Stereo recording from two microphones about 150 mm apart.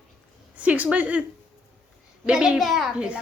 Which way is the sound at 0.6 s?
10° right (ahead or behind).